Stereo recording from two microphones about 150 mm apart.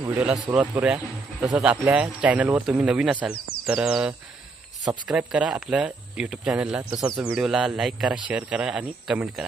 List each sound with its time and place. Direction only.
0.1 s speech: 10° right (ahead or behind)
6.8 s speech: 25° right (ahead or behind)
7.3 s a man's voice: 5° right (ahead or behind)